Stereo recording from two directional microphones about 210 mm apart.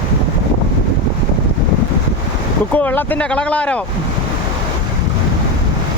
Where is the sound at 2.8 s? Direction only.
10° left (ahead or behind).